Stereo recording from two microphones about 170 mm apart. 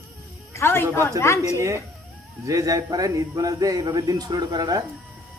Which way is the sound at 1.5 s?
15° right (ahead or behind).